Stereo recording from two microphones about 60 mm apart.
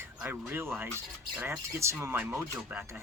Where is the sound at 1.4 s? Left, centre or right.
Right.